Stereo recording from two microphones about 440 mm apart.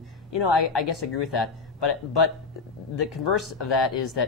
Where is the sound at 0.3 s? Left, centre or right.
Left.